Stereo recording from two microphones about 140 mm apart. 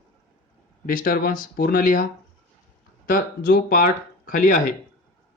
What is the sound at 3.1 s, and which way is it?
Speech, 90° left.